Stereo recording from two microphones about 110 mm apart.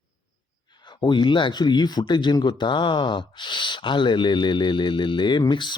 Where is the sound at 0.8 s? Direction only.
45° left (ahead or behind).